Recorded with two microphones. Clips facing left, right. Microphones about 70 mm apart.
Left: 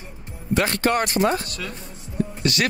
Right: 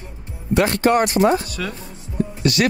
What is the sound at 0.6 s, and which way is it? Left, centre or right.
Speech, right.